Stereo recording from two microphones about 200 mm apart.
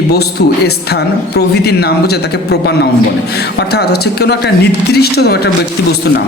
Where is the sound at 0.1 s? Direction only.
55° left (ahead or behind).